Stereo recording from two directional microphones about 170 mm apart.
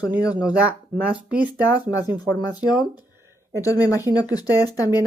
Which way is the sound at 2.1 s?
20° left (ahead or behind).